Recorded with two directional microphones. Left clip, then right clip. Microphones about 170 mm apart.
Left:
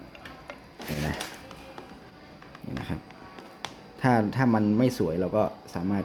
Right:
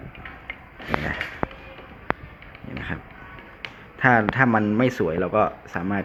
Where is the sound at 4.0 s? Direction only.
15° left (ahead or behind).